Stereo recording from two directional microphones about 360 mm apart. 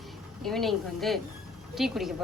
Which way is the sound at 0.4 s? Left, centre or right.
Centre.